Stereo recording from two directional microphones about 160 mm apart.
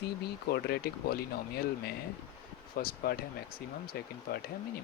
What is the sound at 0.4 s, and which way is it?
Speech, 80° left.